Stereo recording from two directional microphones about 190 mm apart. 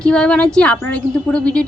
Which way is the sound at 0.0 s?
5° left (ahead or behind).